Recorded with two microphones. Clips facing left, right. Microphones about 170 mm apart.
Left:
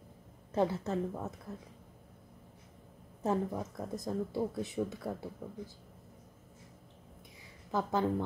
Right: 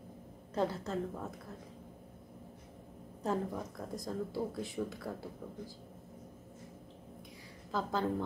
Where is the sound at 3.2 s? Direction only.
20° left (ahead or behind).